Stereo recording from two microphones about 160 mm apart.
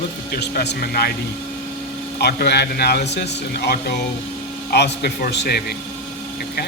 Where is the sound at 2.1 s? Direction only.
90° left.